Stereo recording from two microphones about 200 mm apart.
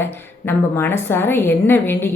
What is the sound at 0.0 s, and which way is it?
Speech, 10° left (ahead or behind).